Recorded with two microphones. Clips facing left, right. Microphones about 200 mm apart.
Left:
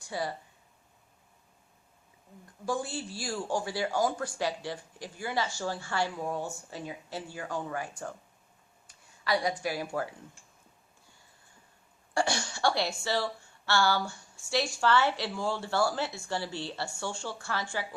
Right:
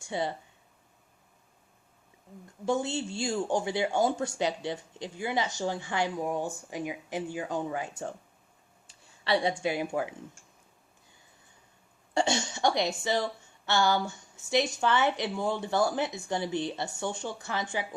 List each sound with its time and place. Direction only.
0.0 s speech: 25° right (ahead or behind)
2.6 s a woman's voice: 25° right (ahead or behind)
9.2 s a woman's voice: 25° right (ahead or behind)
12.1 s a woman's voice: 20° right (ahead or behind)